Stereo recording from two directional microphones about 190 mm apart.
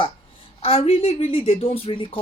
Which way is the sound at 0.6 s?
30° left (ahead or behind).